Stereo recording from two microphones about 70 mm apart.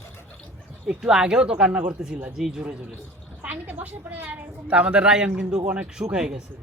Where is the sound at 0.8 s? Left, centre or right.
Centre.